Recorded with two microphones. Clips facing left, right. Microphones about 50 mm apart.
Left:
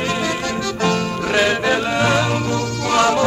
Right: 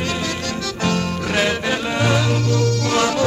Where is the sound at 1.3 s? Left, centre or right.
Left.